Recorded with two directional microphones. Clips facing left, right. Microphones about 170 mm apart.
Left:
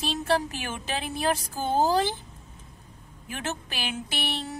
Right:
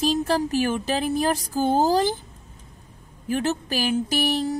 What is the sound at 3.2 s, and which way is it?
A woman's voice, 35° right (ahead or behind).